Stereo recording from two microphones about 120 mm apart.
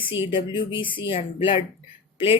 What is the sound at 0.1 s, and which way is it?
Speech, 45° left (ahead or behind).